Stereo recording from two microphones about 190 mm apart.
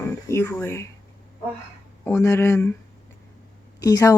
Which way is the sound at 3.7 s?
20° left (ahead or behind).